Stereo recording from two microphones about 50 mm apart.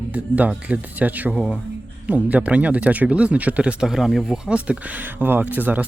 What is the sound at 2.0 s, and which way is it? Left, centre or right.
Speech, right.